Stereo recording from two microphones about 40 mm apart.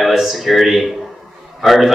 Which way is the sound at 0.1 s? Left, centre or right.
Centre.